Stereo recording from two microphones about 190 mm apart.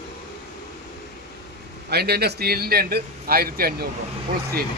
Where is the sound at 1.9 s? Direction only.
55° right (ahead or behind).